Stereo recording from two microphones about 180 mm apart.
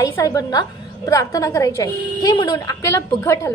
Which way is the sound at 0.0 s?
20° left (ahead or behind).